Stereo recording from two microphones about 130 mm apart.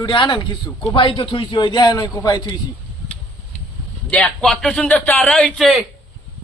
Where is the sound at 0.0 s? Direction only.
40° left (ahead or behind).